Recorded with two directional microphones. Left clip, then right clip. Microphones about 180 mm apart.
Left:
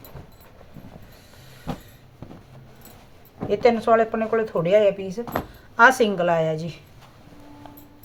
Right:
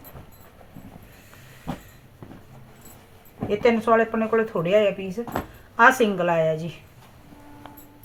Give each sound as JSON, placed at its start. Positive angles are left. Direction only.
{"t": 3.5, "sound": "speech", "side_deg": 5}